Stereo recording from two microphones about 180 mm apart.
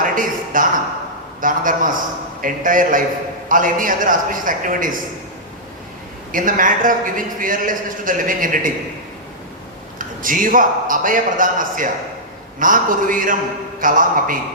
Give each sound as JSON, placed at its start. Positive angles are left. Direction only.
{"t": 0.0, "sound": "a sound", "side_deg": -50}
{"t": 1.4, "sound": "a man's voice", "side_deg": -50}
{"t": 6.3, "sound": "a man's voice", "side_deg": -50}
{"t": 10.2, "sound": "a man's voice", "side_deg": -50}